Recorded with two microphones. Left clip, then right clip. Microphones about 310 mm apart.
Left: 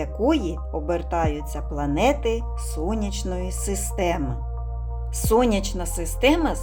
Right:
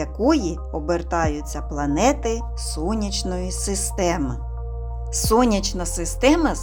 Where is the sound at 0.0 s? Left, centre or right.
Centre.